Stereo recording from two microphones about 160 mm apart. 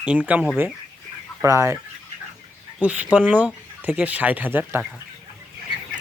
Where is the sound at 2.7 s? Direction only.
10° right (ahead or behind).